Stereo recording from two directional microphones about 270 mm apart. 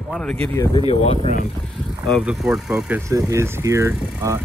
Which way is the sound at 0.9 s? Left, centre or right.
Left.